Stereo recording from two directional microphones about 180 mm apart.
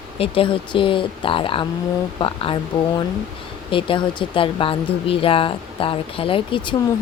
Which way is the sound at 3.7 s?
30° left (ahead or behind).